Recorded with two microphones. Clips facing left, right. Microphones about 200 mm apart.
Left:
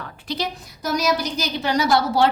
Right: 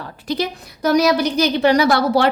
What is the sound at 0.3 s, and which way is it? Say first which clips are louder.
A woman's voice: right 5 dB; 60° right (ahead or behind).